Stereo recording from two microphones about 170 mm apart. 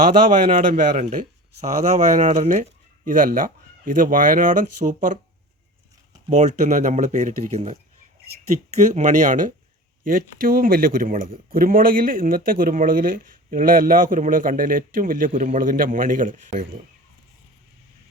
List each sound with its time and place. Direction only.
0.3 s speech: 50° right (ahead or behind)
6.3 s speech: 45° right (ahead or behind)
8.8 s speech: 45° right (ahead or behind)